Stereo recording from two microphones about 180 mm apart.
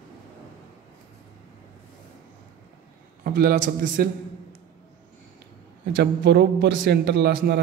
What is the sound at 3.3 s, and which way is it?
A man's voice, 50° right (ahead or behind).